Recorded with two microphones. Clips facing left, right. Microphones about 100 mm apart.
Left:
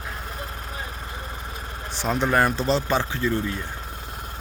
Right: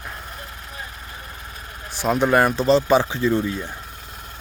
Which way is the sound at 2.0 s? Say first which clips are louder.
Right 4 dB; 5° right (ahead or behind).